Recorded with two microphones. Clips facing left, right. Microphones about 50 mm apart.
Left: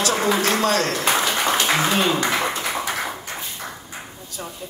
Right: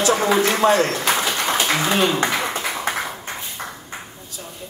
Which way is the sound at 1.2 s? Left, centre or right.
Centre.